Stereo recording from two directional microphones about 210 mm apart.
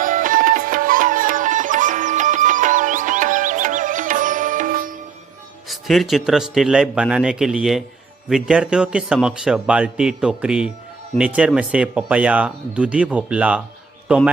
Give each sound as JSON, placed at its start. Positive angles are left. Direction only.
{"t": 0.0, "sound": "music", "side_deg": -40}
{"t": 5.7, "sound": "a man's voice", "side_deg": 0}